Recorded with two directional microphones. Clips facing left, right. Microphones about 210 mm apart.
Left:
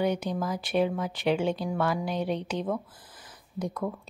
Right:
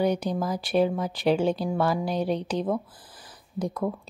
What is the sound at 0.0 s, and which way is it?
A woman's voice, 35° right (ahead or behind).